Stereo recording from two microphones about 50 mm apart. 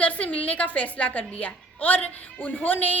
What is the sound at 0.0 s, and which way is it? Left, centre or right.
A woman's voice, left.